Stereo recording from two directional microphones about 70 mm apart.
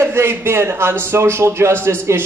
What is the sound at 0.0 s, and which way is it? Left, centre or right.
A woman's voice, right.